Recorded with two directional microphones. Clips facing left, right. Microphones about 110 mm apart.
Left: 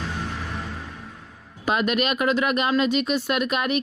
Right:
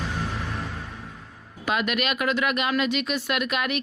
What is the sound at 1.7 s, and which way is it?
Speech, 35° left (ahead or behind).